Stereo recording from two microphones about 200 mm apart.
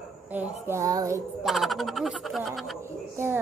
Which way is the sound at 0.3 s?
10° right (ahead or behind).